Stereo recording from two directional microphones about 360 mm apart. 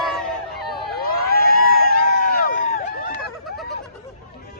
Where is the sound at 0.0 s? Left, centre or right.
Centre.